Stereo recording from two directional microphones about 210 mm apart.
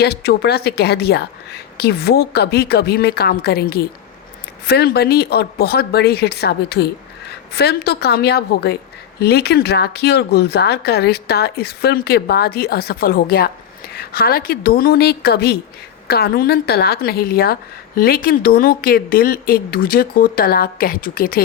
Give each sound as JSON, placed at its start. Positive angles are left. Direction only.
{"t": 0.0, "sound": "a woman's voice", "side_deg": 50}